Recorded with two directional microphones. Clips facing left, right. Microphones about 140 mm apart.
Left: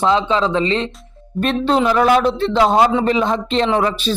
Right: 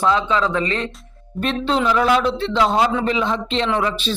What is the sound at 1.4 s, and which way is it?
Speech, 45° left (ahead or behind).